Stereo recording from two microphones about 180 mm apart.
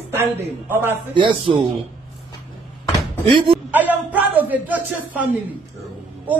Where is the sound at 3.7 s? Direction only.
10° right (ahead or behind).